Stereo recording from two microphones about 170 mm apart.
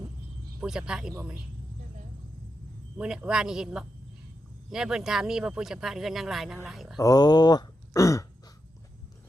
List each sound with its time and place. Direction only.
0.6 s speech: 5° right (ahead or behind)
3.0 s speech: 5° right (ahead or behind)
7.0 s speech: 20° left (ahead or behind)